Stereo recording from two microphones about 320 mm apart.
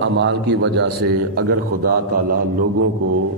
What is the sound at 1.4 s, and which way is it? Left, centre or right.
A man's voice, right.